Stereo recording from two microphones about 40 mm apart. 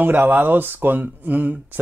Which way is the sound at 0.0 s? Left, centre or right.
Right.